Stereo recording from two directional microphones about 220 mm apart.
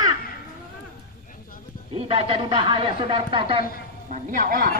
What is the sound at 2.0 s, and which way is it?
Speech, 25° right (ahead or behind).